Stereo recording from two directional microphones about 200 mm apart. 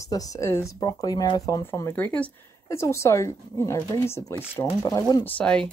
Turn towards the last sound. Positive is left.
turn(degrees=5)  # may be behind; listen again after turning